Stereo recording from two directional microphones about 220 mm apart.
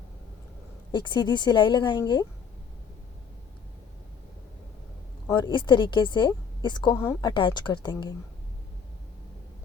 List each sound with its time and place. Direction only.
0.9 s a woman's voice: 20° left (ahead or behind)
5.3 s a woman's voice: 20° left (ahead or behind)